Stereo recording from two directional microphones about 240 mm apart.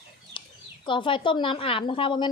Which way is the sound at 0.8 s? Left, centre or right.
Centre.